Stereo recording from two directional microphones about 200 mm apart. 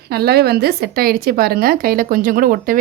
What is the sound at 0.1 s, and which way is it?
Speech, 50° right (ahead or behind).